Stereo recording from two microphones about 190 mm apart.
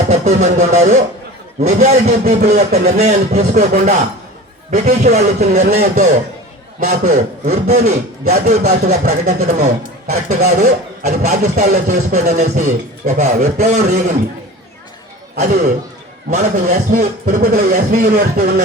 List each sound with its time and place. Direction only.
0.1 s speech: 35° right (ahead or behind)
16.3 s speech: 40° right (ahead or behind)